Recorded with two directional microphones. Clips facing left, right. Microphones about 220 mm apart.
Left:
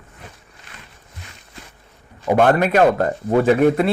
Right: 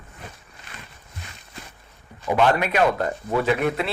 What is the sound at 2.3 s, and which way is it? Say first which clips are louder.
Speech: left 5 dB; 50° left (ahead or behind).